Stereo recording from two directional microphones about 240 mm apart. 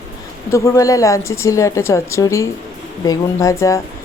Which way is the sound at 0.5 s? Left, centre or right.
Centre.